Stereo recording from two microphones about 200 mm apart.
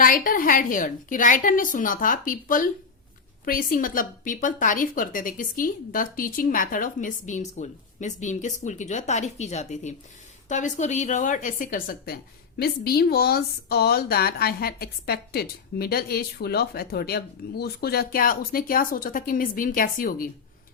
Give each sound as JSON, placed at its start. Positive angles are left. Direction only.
{"t": 0.0, "sound": "a woman's voice", "side_deg": 45}